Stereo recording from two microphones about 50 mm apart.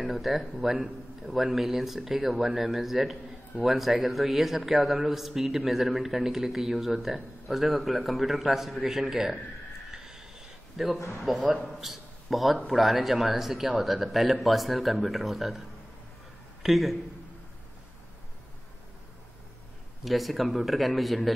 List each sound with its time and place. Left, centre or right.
0.0 s a man's voice: centre
9.8 s a sound: centre
10.8 s a man's voice: centre
16.6 s a man's voice: centre
20.1 s a man's voice: centre